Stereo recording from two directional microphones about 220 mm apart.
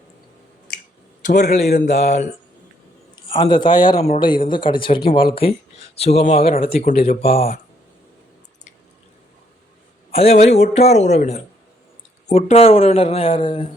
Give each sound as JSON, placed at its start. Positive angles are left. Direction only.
{"t": 1.6, "sound": "a sound", "side_deg": 45}
{"t": 1.9, "sound": "speech", "side_deg": 30}
{"t": 10.1, "sound": "a man's voice", "side_deg": 25}